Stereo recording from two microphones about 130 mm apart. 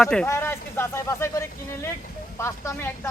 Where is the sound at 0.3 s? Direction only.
20° left (ahead or behind).